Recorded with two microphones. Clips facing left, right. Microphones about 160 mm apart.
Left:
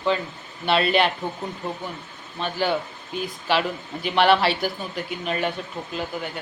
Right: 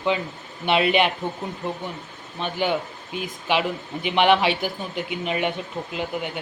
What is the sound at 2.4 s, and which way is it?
A man's voice, 15° right (ahead or behind).